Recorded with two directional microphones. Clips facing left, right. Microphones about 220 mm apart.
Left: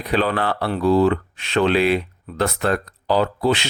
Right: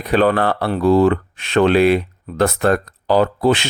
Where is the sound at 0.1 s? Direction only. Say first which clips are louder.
Right 5 dB; 50° right (ahead or behind).